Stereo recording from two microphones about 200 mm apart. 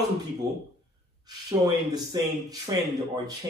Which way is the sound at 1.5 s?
20° right (ahead or behind).